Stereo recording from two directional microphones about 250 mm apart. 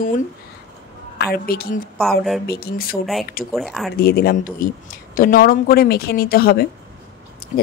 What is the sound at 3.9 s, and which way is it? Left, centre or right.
Speech, left.